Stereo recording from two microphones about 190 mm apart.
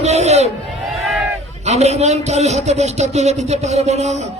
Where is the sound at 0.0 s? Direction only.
35° right (ahead or behind).